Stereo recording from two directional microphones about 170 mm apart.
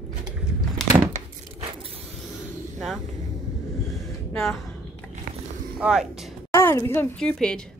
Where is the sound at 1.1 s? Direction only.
35° right (ahead or behind).